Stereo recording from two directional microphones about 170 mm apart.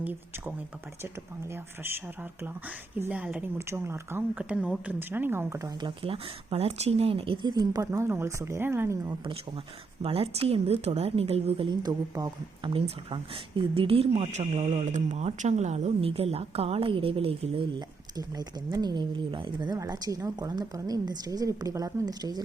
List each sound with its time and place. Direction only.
0.0 s speech: 10° right (ahead or behind)
6.0 s speech: 30° right (ahead or behind); by 9.1 s 15° right (ahead or behind)
10.0 s a woman's voice: 35° right (ahead or behind)